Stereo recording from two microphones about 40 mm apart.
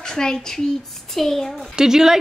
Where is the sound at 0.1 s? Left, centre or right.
Centre.